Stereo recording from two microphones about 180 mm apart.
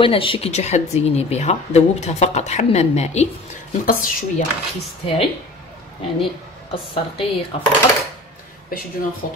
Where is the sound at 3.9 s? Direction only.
50° left (ahead or behind).